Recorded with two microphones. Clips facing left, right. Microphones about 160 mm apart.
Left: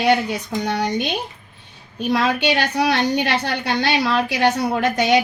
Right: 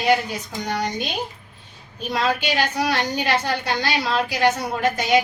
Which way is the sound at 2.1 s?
65° left (ahead or behind).